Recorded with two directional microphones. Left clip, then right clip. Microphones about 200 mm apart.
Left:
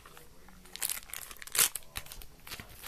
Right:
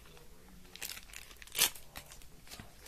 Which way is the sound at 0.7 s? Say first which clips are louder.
Left 5 dB; 25° right (ahead or behind).